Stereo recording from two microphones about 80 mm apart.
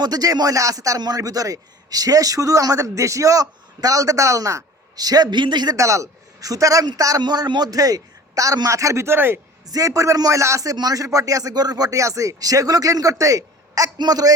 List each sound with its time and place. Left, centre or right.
0.0 s speech: right
5.7 s speech: right
7.2 s speech: right
9.6 s speech: right